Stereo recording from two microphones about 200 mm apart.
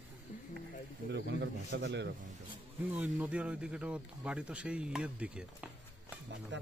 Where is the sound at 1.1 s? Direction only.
60° right (ahead or behind).